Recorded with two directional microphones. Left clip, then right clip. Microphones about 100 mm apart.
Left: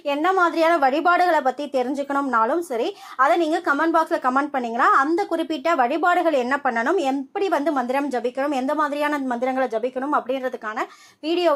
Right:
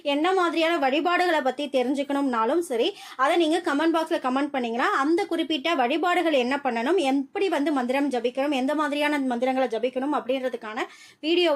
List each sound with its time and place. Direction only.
0.1 s a woman's voice: 20° right (ahead or behind)
0.5 s a woman's voice: centre (ahead or behind)
1.1 s a woman's voice: 20° right (ahead or behind)